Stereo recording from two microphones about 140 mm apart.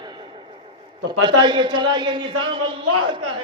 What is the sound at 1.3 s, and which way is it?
A woman's voice, 35° right (ahead or behind).